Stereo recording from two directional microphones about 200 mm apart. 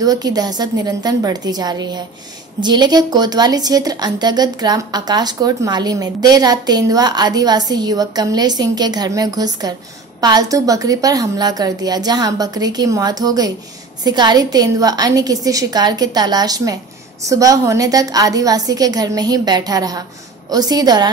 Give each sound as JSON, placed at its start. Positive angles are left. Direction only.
{"t": 0.0, "sound": "a woman's voice", "side_deg": -20}